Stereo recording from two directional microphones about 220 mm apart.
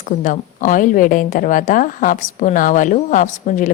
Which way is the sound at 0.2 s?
35° left (ahead or behind).